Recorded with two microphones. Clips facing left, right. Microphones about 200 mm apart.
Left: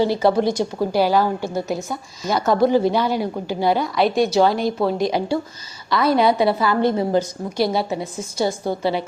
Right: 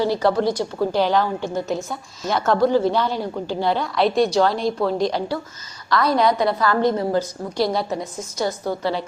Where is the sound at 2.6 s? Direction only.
15° left (ahead or behind).